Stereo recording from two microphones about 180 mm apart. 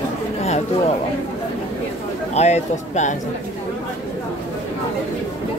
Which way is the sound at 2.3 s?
40° left (ahead or behind).